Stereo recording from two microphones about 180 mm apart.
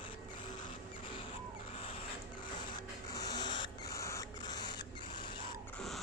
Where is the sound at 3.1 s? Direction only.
20° left (ahead or behind).